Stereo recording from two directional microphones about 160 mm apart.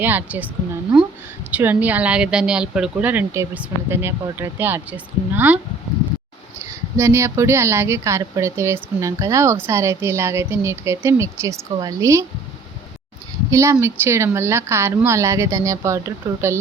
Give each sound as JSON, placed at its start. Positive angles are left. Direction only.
{"t": 0.0, "sound": "speech", "side_deg": -10}
{"t": 6.9, "sound": "speech", "side_deg": -15}
{"t": 13.5, "sound": "speech", "side_deg": -15}